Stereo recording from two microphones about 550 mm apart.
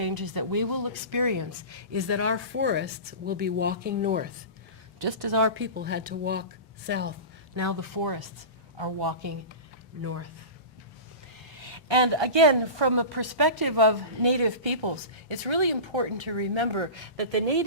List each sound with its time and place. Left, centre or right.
0.0 s speech: right; by 4.3 s centre
4.9 s a woman's voice: right
5.4 s speech: right
7.5 s speech: right
10.0 s speech: right
11.6 s a woman's voice: right